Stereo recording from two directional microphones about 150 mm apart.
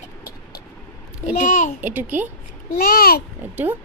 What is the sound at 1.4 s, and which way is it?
Speech, 55° left (ahead or behind).